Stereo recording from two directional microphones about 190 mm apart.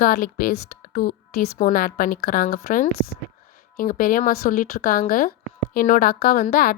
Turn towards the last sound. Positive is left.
turn(degrees=50)  # may be behind; listen again after turning